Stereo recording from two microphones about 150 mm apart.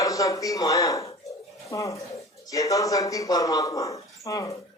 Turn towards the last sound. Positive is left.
turn(degrees=20)  # may be behind; listen again after turning